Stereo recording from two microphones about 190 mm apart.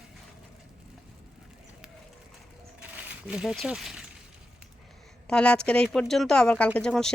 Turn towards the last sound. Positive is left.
turn(degrees=5)  # may be behind; listen again after turning